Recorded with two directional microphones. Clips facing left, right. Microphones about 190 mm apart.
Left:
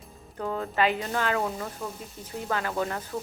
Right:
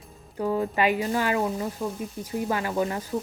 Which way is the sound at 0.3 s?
10° right (ahead or behind).